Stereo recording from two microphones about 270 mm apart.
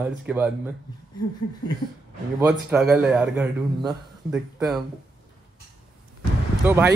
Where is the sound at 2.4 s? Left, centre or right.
Centre.